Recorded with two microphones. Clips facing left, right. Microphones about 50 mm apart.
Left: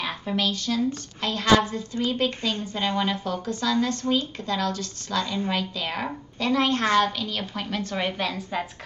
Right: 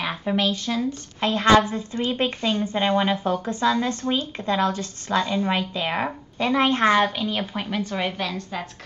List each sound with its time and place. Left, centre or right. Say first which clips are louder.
0.0 s a woman's voice: right 3 dB; centre